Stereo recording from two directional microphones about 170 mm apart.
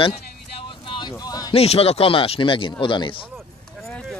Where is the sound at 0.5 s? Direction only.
30° left (ahead or behind).